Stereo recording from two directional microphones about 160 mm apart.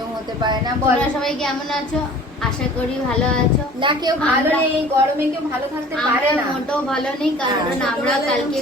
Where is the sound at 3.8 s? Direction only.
30° right (ahead or behind).